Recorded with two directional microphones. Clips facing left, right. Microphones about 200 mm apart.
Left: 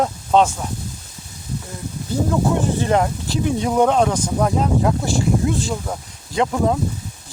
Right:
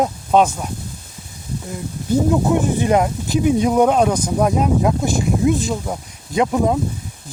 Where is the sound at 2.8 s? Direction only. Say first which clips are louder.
Right 2 dB; 15° right (ahead or behind).